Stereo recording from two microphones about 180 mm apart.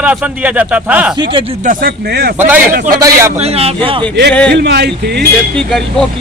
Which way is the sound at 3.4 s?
35° right (ahead or behind).